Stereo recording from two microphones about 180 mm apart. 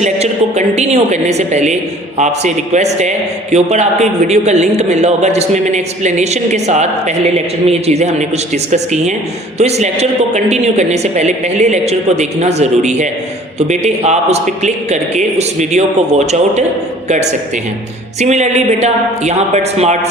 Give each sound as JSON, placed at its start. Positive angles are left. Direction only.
{"t": 0.0, "sound": "a man's voice", "side_deg": -40}
{"t": 18.2, "sound": "a man's voice", "side_deg": -40}